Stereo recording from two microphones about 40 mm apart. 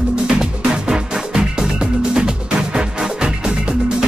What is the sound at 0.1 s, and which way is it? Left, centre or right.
Music, centre.